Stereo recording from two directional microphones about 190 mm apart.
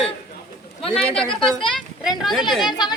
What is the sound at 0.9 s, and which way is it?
Speech, 5° left (ahead or behind).